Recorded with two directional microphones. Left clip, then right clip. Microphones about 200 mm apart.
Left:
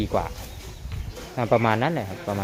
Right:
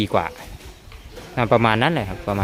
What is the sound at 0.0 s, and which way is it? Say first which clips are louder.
Speech: right 5 dB; 30° right (ahead or behind).